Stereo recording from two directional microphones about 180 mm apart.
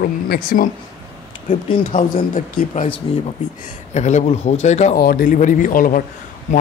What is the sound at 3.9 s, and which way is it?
Speech, 40° left (ahead or behind).